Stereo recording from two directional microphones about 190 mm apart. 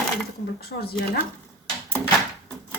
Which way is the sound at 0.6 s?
55° left (ahead or behind).